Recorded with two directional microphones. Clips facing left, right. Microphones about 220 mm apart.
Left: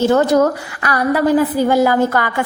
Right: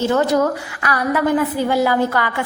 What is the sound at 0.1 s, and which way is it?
A woman's voice, 40° left (ahead or behind).